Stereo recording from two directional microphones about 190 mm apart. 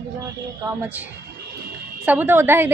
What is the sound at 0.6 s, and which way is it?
A woman's voice, 10° right (ahead or behind).